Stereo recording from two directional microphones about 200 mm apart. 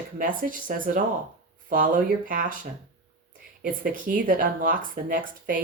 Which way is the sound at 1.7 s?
45° right (ahead or behind).